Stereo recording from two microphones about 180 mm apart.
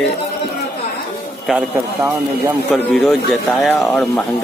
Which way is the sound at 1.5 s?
5° right (ahead or behind).